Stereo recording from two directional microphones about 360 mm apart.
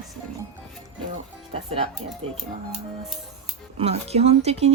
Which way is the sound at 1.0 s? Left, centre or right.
Centre.